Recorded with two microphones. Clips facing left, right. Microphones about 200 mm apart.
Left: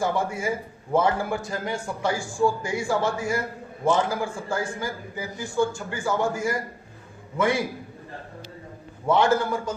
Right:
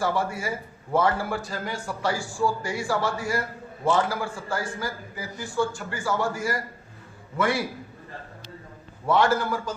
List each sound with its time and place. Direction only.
0.0 s a man's voice: 20° left (ahead or behind)
9.0 s a man's voice: 25° left (ahead or behind)